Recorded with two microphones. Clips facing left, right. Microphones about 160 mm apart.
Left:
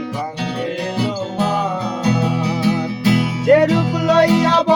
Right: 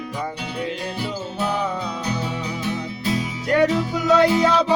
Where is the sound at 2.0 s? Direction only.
80° left.